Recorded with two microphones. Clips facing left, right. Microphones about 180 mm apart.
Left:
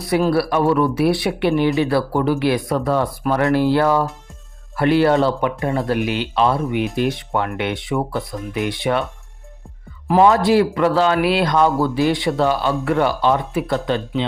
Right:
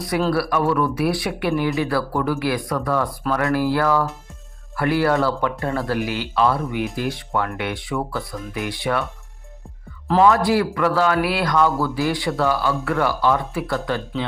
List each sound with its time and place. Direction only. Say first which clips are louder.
0.3 s speech: left 2 dB; 25° left (ahead or behind)
10.2 s speech: left 3 dB; 20° left (ahead or behind)